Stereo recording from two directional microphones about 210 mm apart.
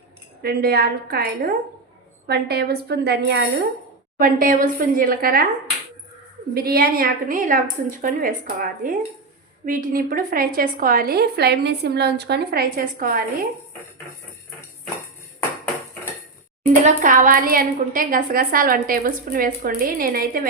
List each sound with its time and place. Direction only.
0.4 s a woman's voice: 45° right (ahead or behind)
6.5 s a woman's voice: 45° right (ahead or behind)
16.8 s a woman's voice: 40° right (ahead or behind)